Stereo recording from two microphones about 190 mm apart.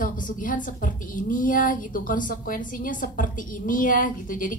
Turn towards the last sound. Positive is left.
turn(degrees=45)  # may be behind; listen again after turning